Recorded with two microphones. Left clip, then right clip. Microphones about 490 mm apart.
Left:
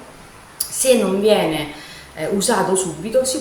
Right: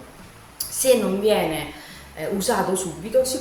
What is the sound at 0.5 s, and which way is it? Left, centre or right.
A woman's voice, right.